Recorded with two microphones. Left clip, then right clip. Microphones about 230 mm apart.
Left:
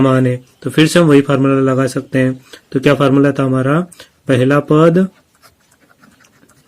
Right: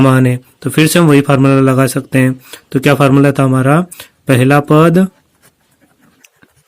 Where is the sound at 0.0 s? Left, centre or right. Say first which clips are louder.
Right 2 dB; right.